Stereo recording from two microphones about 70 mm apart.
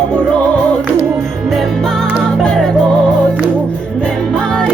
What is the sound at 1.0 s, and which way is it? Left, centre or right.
Music, right.